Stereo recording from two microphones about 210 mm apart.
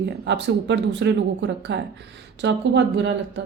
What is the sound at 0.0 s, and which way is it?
Speech, 55° right (ahead or behind).